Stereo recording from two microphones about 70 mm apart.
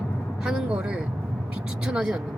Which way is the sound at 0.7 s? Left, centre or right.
Centre.